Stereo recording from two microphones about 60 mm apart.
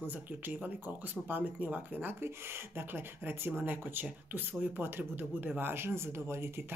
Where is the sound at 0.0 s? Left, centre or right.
Right.